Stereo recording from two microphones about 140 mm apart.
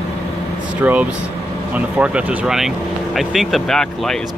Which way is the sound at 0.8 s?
10° right (ahead or behind).